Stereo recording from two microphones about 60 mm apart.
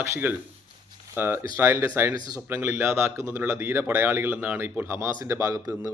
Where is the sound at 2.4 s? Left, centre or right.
Right.